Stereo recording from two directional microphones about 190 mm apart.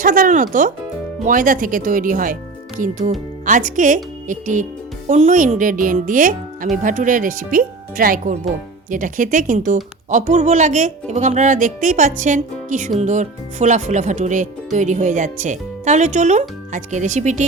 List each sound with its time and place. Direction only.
0.0 s speech: 45° right (ahead or behind)